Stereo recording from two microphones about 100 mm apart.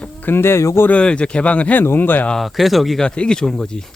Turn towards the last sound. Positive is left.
turn(degrees=5)  # may be behind; listen again after turning